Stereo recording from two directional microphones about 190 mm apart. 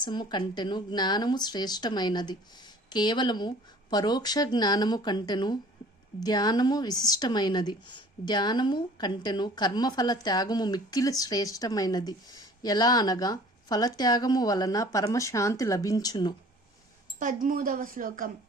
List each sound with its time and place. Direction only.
0.0 s a woman's voice: 25° left (ahead or behind)
17.2 s speech: 45° right (ahead or behind)